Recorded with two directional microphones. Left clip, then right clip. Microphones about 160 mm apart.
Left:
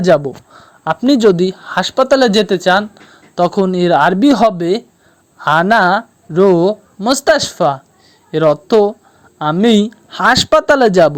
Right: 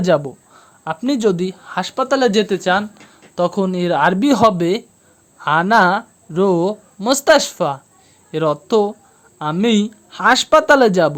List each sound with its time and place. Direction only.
0.0 s speech: 20° left (ahead or behind)
5.4 s speech: 35° left (ahead or behind)